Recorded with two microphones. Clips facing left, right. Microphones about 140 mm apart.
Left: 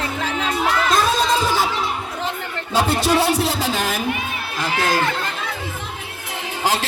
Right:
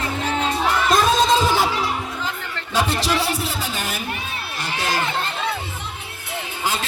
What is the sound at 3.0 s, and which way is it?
Music, 65° left (ahead or behind).